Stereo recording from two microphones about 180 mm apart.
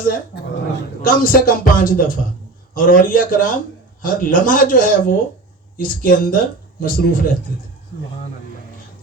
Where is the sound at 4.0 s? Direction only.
50° left (ahead or behind).